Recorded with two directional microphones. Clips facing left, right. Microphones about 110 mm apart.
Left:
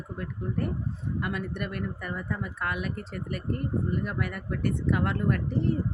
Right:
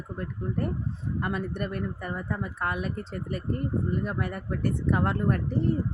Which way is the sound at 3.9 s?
30° right (ahead or behind).